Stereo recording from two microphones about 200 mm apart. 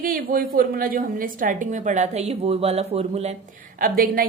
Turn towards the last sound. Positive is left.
turn(degrees=-45)  # may be behind; listen again after turning